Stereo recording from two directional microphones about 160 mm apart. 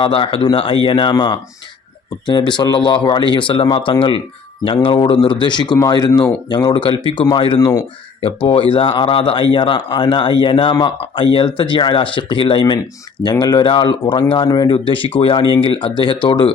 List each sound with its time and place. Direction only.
0.0 s speech: 35° left (ahead or behind)